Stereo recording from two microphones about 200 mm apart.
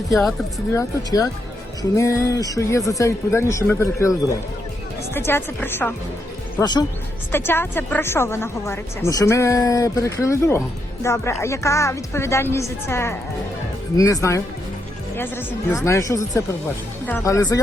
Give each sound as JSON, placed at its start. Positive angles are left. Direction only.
{"t": 0.1, "sound": "speech", "side_deg": 0}
{"t": 0.8, "sound": "a woman's voice", "side_deg": 15}
{"t": 5.1, "sound": "a woman's voice", "side_deg": 10}
{"t": 6.6, "sound": "a woman's voice", "side_deg": 20}